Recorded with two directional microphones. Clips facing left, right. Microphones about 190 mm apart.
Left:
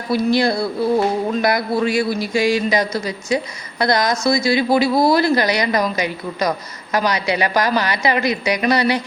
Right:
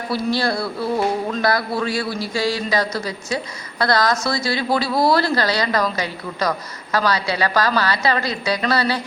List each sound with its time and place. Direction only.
0.1 s speech: 15° left (ahead or behind)